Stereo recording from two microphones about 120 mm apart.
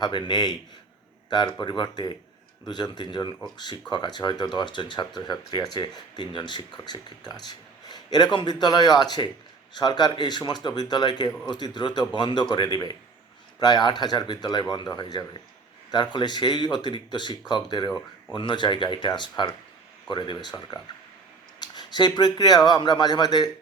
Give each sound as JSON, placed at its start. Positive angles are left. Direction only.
{"t": 0.0, "sound": "speech", "side_deg": 40}